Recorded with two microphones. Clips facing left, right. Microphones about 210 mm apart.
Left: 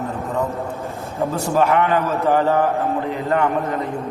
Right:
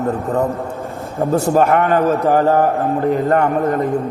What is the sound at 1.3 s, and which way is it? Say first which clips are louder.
A man's voice: right 5 dB; 50° right (ahead or behind).